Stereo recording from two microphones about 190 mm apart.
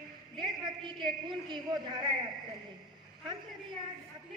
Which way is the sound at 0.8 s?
25° right (ahead or behind).